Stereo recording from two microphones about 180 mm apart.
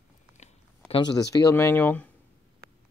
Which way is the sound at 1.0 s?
20° left (ahead or behind).